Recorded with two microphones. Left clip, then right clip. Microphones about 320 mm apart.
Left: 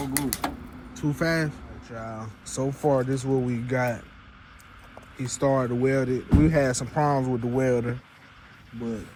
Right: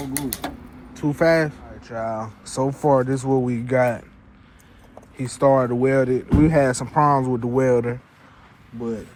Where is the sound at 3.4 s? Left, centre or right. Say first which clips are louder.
Right 5 dB; right.